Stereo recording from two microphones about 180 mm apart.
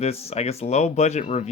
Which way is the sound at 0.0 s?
35° left (ahead or behind).